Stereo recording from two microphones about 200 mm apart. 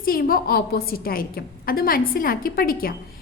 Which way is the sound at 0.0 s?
45° left (ahead or behind).